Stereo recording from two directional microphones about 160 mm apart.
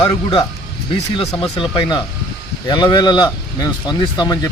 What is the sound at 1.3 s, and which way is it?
Speech, 30° left (ahead or behind).